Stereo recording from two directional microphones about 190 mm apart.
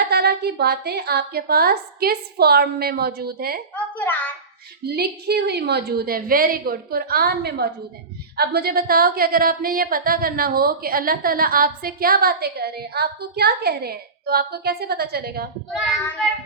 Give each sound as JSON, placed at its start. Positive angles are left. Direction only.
{"t": 0.1, "sound": "a woman's voice", "side_deg": -60}
{"t": 3.8, "sound": "a woman's voice", "side_deg": 10}
{"t": 4.9, "sound": "a woman's voice", "side_deg": -55}